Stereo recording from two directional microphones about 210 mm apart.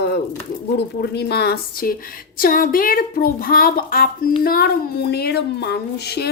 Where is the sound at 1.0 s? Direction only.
50° left (ahead or behind).